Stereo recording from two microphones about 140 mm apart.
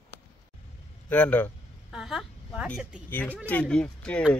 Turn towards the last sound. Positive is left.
turn(degrees=5)  # may be behind; listen again after turning